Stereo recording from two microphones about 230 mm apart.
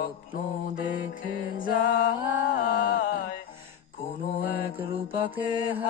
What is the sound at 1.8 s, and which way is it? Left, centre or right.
Music, left.